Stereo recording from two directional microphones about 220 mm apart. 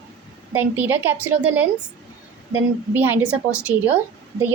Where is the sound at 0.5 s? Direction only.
10° right (ahead or behind).